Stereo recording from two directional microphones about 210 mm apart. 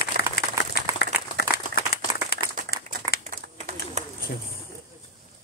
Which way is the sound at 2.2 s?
45° left (ahead or behind).